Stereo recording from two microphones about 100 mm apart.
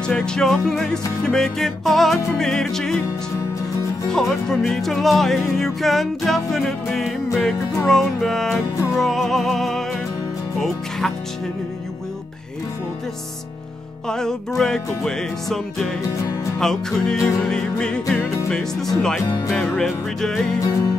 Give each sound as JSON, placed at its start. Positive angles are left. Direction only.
{"t": 0.1, "sound": "music", "side_deg": 10}
{"t": 4.1, "sound": "music", "side_deg": 5}
{"t": 14.0, "sound": "music", "side_deg": 5}
{"t": 20.5, "sound": "music", "side_deg": 35}